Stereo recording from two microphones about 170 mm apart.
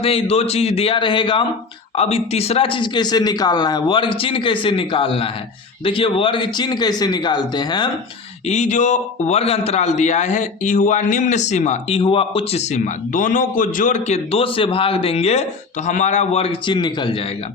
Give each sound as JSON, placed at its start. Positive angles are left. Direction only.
{"t": 0.0, "sound": "speech", "side_deg": 35}
{"t": 8.4, "sound": "a man's voice", "side_deg": 45}
{"t": 14.3, "sound": "speech", "side_deg": 35}